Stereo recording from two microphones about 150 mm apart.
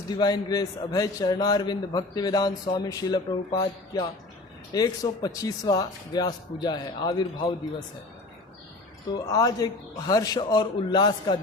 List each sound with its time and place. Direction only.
0.1 s a man's voice: 25° left (ahead or behind)
9.1 s a man's voice: 25° left (ahead or behind)